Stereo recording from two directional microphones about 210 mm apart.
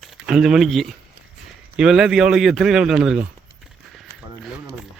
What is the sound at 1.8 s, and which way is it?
Speech, 5° right (ahead or behind).